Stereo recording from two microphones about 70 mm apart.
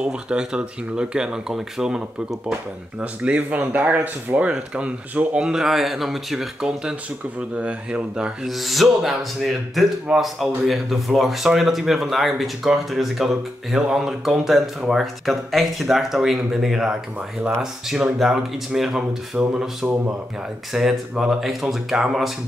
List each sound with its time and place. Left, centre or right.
0.0 s speech: centre
8.5 s a man's voice: centre
19.3 s speech: centre